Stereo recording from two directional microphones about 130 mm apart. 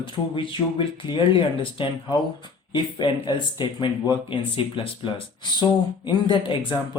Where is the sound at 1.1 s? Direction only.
40° left (ahead or behind).